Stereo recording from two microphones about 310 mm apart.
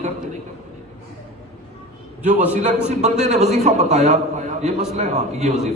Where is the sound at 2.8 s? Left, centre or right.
Right.